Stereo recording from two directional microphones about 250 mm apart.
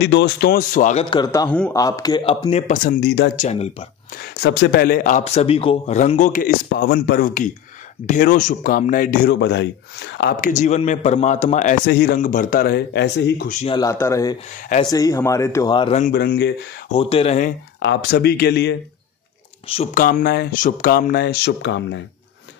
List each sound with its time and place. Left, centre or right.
0.0 s a man's voice: left
1.1 s a man's voice: centre; by 3.3 s left
3.3 s speech: left
4.2 s a man's voice: left
13.5 s speech: left
13.7 s a man's voice: centre
16.0 s a man's voice: left
16.9 s speech: left
17.7 s a man's voice: left
19.7 s a man's voice: left